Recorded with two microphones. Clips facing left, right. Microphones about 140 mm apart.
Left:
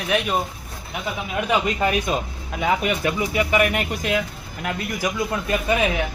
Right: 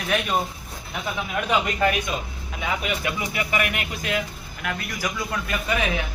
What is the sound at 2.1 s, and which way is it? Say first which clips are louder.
Speech: left 5 dB; 40° left (ahead or behind).